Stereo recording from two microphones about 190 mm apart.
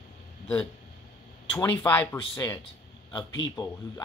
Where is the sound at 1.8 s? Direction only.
10° left (ahead or behind).